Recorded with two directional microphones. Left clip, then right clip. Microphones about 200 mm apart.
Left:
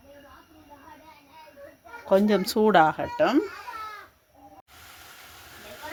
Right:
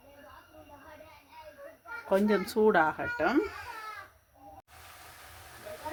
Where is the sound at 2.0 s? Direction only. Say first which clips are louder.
Left 6 dB; 35° left (ahead or behind).